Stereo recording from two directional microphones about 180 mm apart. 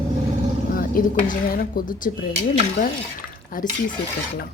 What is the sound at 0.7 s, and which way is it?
Speech, 50° left (ahead or behind).